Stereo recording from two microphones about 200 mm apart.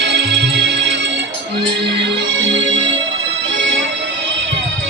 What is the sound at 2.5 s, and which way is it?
Music, 65° right (ahead or behind).